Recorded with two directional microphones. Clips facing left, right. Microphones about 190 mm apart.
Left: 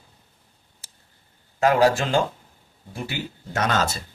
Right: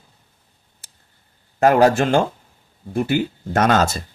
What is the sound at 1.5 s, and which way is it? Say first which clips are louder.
Speech: right 4 dB; 55° right (ahead or behind).